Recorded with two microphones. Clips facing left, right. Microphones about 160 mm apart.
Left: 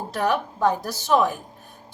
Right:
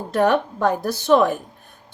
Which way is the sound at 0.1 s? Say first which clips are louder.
Right 6 dB; 55° right (ahead or behind).